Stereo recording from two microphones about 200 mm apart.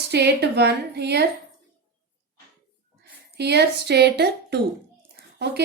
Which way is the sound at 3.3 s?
55° right (ahead or behind).